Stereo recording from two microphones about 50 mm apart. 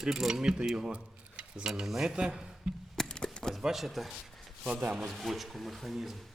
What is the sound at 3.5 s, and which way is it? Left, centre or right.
Speech, centre.